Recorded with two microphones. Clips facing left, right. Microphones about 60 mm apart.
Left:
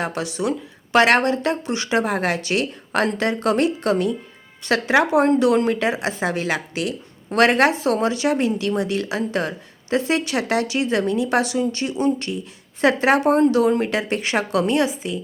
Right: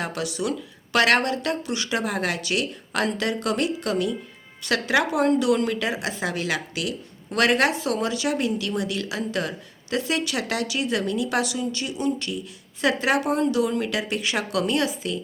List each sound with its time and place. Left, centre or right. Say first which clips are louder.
0.0 s a woman's voice: left 4 dB; left